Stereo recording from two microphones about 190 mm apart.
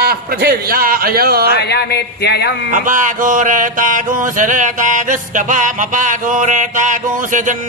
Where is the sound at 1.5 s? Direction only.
60° left (ahead or behind).